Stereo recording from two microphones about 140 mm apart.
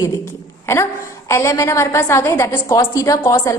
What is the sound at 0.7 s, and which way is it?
A woman's voice, 15° left (ahead or behind).